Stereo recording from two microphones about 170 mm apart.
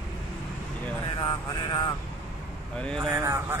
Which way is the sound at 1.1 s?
25° left (ahead or behind).